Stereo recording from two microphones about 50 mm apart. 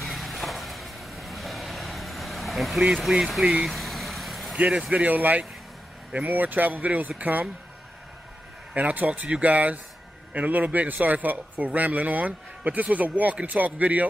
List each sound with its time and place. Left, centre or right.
0.0 s vehicle: centre
4.6 s speech: right
8.7 s speech: right